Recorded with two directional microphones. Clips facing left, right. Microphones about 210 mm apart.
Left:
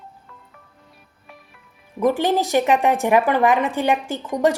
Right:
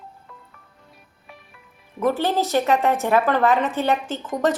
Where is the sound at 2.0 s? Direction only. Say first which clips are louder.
Left 2 dB; 15° left (ahead or behind).